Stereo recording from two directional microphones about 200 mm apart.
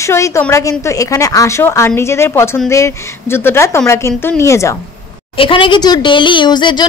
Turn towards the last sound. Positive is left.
turn(degrees=20)  # may be behind; listen again after turning